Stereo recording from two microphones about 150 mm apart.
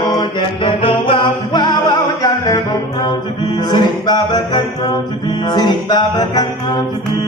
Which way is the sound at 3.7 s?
30° left (ahead or behind).